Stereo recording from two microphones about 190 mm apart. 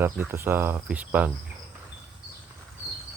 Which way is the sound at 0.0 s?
10° right (ahead or behind).